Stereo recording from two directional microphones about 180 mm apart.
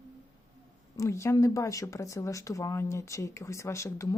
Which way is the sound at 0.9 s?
15° left (ahead or behind).